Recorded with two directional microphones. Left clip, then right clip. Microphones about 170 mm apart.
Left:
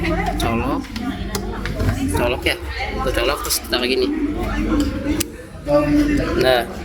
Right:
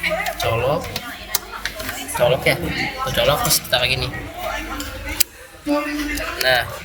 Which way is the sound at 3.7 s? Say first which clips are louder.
Right 1 dB; 55° left (ahead or behind).